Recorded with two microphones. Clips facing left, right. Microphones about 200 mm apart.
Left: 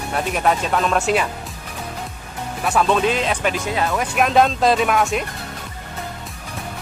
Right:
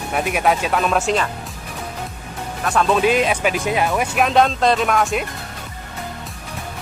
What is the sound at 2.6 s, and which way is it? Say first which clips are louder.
Speech: right 1 dB; 5° left (ahead or behind).